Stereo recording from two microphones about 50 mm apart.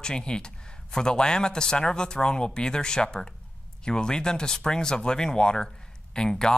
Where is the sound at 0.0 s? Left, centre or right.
Centre.